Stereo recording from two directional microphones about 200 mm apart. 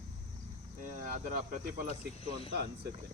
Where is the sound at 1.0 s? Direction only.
45° right (ahead or behind).